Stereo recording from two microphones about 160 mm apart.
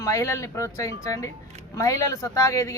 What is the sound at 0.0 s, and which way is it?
Speech, 20° left (ahead or behind).